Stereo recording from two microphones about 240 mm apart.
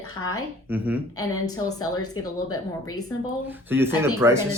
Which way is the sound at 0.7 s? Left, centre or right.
Centre.